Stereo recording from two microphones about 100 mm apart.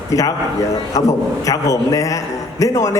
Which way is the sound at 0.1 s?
35° left (ahead or behind).